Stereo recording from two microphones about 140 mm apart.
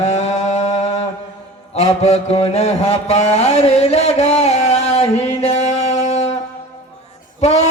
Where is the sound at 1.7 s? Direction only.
45° left (ahead or behind).